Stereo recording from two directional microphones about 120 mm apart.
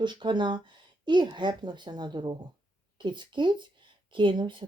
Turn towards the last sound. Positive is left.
turn(degrees=-40)  # may be behind; listen again after turning